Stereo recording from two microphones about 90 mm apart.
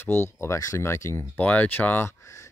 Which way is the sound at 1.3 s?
15° left (ahead or behind).